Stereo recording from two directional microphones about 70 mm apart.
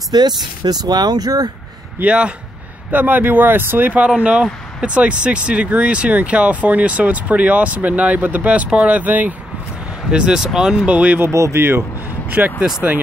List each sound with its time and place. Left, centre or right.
0.1 s speech: right
0.7 s speech: right
2.0 s speech: centre
10.1 s speech: centre
11.1 s speech: right
12.3 s speech: right